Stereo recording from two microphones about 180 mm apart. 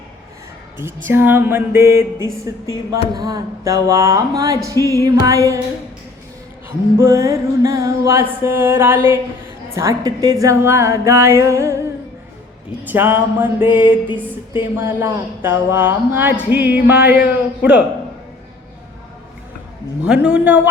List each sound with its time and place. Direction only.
1.0 s music: 10° right (ahead or behind)
6.9 s music: 15° right (ahead or behind)
12.9 s music: 10° right (ahead or behind)
20.1 s music: 5° right (ahead or behind)